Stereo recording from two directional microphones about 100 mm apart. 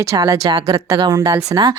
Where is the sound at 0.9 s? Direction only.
45° right (ahead or behind).